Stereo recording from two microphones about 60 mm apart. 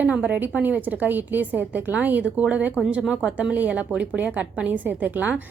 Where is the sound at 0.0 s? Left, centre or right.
Right.